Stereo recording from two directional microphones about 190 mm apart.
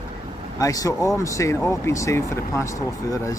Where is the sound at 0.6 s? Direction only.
20° left (ahead or behind).